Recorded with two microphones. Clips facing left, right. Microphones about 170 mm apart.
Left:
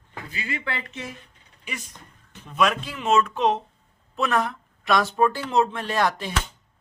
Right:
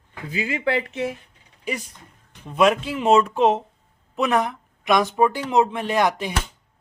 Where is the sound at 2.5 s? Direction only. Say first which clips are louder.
Right 5 dB; 25° right (ahead or behind).